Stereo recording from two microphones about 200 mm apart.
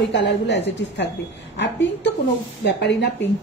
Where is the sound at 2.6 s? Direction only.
55° left (ahead or behind).